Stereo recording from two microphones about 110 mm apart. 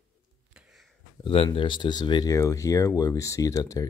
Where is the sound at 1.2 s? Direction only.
55° left (ahead or behind); by 2.3 s 40° left (ahead or behind).